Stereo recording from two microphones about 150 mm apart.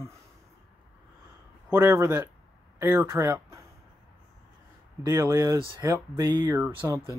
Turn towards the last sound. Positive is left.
turn(degrees=-25)  # may be behind; listen again after turning